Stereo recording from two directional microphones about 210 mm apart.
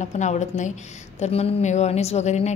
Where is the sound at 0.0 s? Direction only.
35° left (ahead or behind).